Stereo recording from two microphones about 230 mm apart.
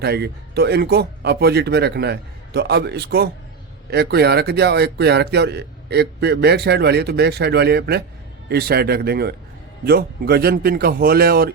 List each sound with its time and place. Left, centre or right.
0.0 s a man's voice: right